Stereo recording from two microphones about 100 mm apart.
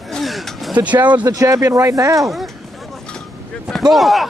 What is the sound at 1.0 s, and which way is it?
Speech, 15° right (ahead or behind).